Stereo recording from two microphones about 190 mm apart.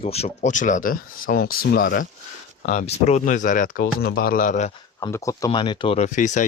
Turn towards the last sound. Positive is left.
turn(degrees=40)  # may be behind; listen again after turning